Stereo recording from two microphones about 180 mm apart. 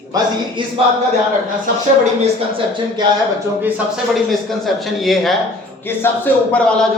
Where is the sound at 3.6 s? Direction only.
5° right (ahead or behind).